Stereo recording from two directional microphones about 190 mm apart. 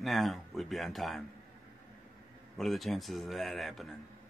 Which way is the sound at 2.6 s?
Centre (ahead or behind).